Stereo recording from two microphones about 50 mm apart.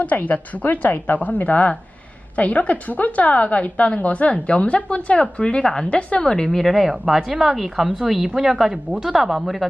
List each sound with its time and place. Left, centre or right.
0.0 s a woman's voice: left; by 5.9 s centre
5.9 s a woman's voice: left
6.3 s speech: centre